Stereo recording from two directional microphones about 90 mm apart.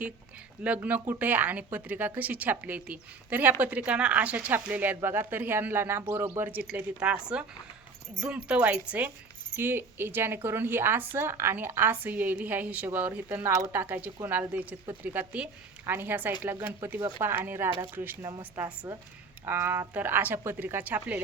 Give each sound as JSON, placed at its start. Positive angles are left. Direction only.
{"t": 0.6, "sound": "a woman's voice", "side_deg": -15}
{"t": 7.0, "sound": "speech", "side_deg": -15}
{"t": 8.2, "sound": "speech", "side_deg": -10}
{"t": 9.6, "sound": "a woman's voice", "side_deg": -25}
{"t": 18.2, "sound": "a woman's voice", "side_deg": -45}
{"t": 18.5, "sound": "a woman's voice", "side_deg": -20}